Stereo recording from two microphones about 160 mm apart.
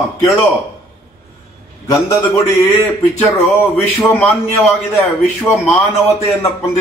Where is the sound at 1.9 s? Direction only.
20° left (ahead or behind).